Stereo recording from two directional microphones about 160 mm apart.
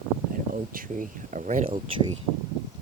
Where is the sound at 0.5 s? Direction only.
60° right (ahead or behind).